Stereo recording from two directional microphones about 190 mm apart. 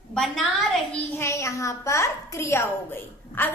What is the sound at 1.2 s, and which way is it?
A child's voice, 15° left (ahead or behind).